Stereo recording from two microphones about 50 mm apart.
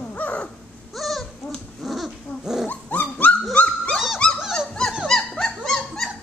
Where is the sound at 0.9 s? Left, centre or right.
Centre.